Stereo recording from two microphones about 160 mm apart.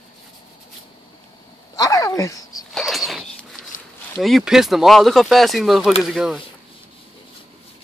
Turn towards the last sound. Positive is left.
turn(degrees=0)  # may be behind; listen again after turning